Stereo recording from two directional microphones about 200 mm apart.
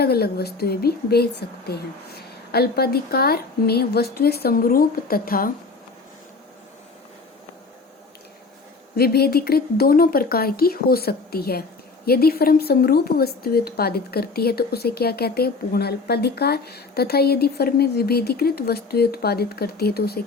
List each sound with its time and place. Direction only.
0.0 s a woman's voice: 50° left (ahead or behind)
9.0 s a woman's voice: 50° left (ahead or behind)